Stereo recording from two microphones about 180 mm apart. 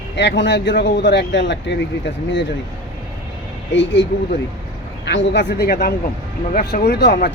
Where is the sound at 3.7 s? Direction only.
90° left.